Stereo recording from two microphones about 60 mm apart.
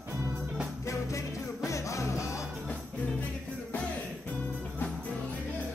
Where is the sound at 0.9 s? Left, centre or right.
Left.